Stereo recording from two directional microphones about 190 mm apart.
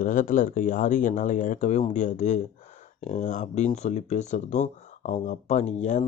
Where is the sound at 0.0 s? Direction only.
45° left (ahead or behind).